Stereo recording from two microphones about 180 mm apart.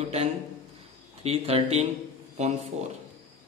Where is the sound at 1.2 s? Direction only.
35° right (ahead or behind).